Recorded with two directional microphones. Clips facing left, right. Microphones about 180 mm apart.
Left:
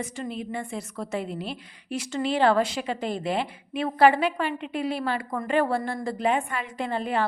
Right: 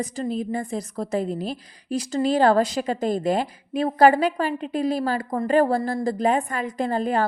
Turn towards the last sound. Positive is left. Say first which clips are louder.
# right 4 dB
turn(degrees=-40)  # may be behind; listen again after turning